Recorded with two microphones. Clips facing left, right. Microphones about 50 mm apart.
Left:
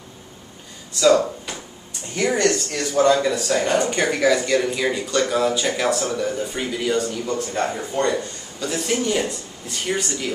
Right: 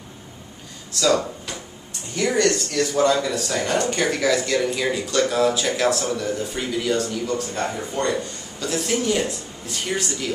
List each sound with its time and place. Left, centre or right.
0.9 s speech: centre
2.1 s speech: left; by 10.3 s centre